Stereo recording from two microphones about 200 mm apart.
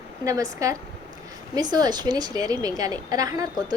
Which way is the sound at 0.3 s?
15° right (ahead or behind).